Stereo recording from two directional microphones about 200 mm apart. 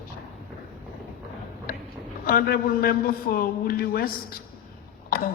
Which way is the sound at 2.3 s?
45° left (ahead or behind).